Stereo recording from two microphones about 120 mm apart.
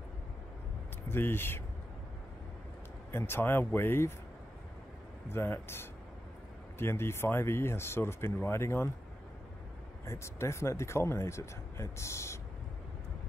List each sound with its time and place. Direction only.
1.0 s speech: 20° left (ahead or behind)
3.1 s speech: 20° left (ahead or behind)
5.3 s speech: 20° left (ahead or behind)
10.0 s speech: 25° left (ahead or behind)